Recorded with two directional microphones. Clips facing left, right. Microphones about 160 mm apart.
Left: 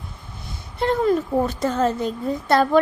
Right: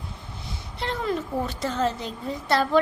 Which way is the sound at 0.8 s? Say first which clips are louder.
Left 8 dB; 45° left (ahead or behind).